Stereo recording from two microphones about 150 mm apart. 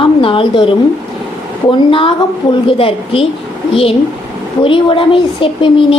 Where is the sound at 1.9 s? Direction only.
35° left (ahead or behind).